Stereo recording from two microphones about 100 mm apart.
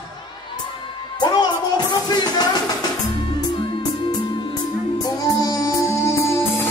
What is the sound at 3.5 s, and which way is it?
Music, 55° left (ahead or behind).